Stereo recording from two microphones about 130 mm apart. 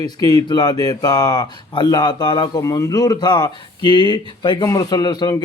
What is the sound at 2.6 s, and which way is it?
Speech, 25° left (ahead or behind).